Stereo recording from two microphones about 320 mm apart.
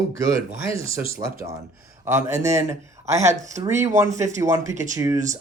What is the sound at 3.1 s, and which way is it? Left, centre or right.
Speech, right.